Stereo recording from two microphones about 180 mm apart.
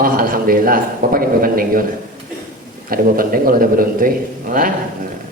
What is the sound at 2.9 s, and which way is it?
Speech, 55° right (ahead or behind).